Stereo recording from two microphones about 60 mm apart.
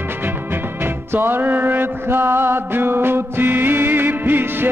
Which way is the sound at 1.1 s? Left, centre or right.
Right.